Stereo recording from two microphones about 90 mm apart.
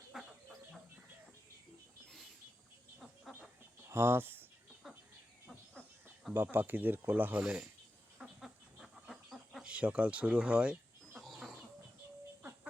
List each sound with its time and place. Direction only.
0.1 s chicken: 5° right (ahead or behind)
3.8 s a sound: 25° right (ahead or behind)
6.3 s speech: 25° right (ahead or behind)
8.2 s chicken: 5° right (ahead or behind)
9.6 s speech: 15° right (ahead or behind)
11.1 s chicken: centre (ahead or behind)